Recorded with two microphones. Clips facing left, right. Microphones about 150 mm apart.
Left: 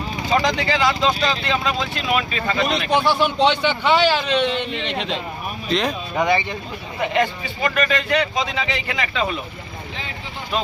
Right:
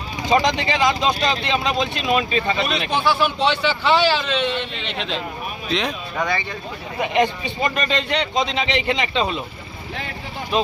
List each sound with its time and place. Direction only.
0.3 s speech: 20° right (ahead or behind)
2.9 s speech: centre (ahead or behind)
3.2 s a man's voice: 15° left (ahead or behind)
5.6 s speech: centre (ahead or behind)
6.1 s speech: 20° left (ahead or behind)
7.0 s speech: 20° right (ahead or behind)
10.5 s speech: 20° right (ahead or behind)